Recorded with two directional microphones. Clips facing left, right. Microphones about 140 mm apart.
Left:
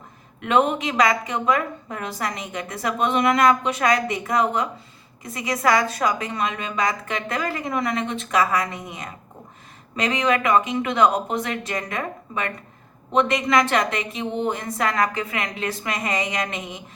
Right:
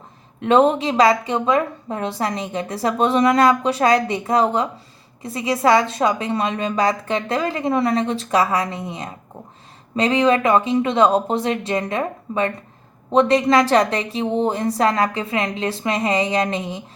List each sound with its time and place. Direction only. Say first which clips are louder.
0.4 s a woman's voice: right 5 dB; 30° right (ahead or behind)